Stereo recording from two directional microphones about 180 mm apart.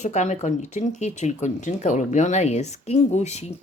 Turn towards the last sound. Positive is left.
turn(degrees=40)  # may be behind; listen again after turning